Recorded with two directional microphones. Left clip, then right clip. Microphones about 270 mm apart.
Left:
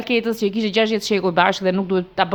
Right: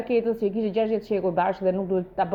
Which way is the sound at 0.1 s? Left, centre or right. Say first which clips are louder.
Left 4 dB; left.